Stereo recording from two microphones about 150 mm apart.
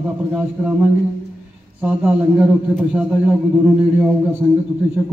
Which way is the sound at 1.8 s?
5° right (ahead or behind).